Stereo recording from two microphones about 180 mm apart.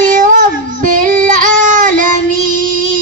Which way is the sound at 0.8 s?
45° right (ahead or behind).